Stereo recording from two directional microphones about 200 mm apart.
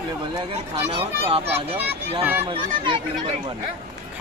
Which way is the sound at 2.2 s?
10° right (ahead or behind).